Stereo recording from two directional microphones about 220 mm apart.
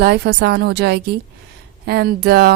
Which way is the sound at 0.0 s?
50° right (ahead or behind).